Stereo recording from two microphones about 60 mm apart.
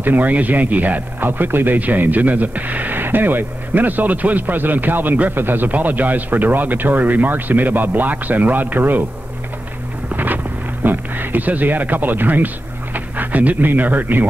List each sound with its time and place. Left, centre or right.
0.0 s speech: right
10.1 s speech: right